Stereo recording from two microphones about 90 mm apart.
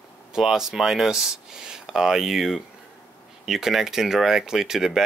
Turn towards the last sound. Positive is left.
turn(degrees=-5)  # may be behind; listen again after turning